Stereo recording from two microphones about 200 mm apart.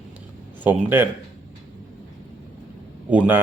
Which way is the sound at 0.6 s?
10° right (ahead or behind).